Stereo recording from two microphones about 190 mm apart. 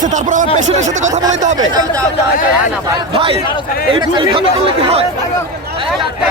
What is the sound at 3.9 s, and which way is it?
Speech, 25° right (ahead or behind).